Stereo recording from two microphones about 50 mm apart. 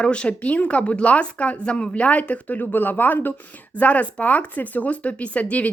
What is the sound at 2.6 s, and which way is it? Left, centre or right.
Speech, left.